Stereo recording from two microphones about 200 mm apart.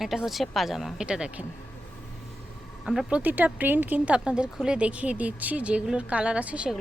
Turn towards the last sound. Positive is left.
turn(degrees=-5)  # may be behind; listen again after turning